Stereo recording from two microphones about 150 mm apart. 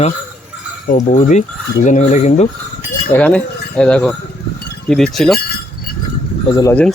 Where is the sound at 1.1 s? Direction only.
55° left (ahead or behind).